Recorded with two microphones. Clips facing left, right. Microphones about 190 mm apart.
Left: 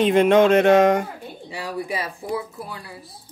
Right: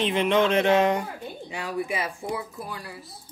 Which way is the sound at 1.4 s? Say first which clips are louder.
Left 1 dB; 35° left (ahead or behind).